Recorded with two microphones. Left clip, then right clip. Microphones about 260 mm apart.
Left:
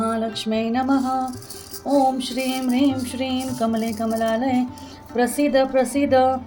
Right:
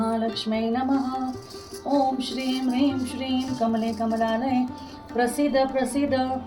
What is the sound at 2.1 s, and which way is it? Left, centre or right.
Music, left.